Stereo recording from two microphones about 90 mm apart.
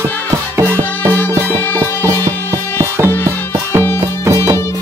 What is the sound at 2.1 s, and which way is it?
Music, 40° right (ahead or behind).